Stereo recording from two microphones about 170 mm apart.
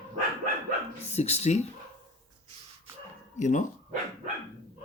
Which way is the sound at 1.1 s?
40° left (ahead or behind).